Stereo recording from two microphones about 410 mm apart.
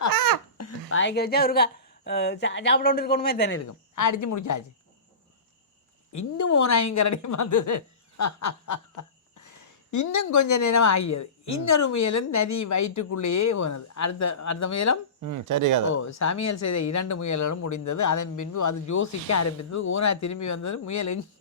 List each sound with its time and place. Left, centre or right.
0.1 s babbling: right
0.6 s speech: left
3.6 s a woman's voice: left
6.1 s speech: left
15.2 s speech: right
16.0 s speech: left